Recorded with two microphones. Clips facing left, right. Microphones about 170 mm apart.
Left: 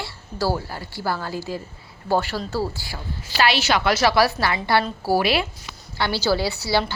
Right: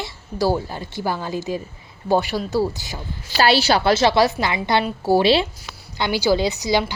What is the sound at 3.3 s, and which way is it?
A woman's voice, 35° right (ahead or behind).